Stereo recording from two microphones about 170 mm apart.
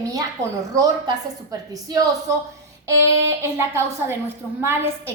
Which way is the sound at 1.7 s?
20° right (ahead or behind).